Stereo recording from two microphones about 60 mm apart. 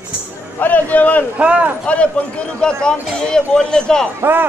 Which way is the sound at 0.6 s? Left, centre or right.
Left.